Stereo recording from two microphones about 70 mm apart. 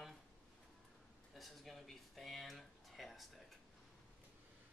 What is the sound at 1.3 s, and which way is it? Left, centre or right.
Speech, centre.